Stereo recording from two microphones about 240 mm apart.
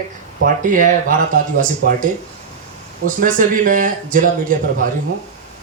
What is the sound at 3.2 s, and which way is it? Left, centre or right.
Speech, right.